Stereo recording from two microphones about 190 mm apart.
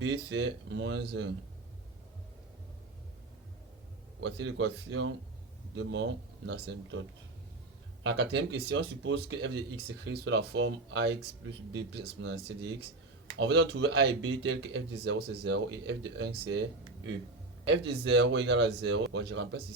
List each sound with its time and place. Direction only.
0.0 s speech: 70° right (ahead or behind)
4.2 s speech: 65° right (ahead or behind)
8.0 s speech: 65° right (ahead or behind)
17.7 s speech: 70° right (ahead or behind)